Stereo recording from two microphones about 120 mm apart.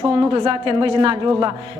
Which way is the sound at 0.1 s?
45° right (ahead or behind).